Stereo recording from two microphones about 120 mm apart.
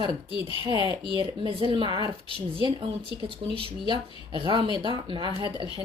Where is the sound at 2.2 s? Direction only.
50° right (ahead or behind).